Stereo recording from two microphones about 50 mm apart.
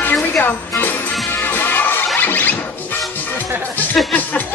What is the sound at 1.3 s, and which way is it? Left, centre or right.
Music, left.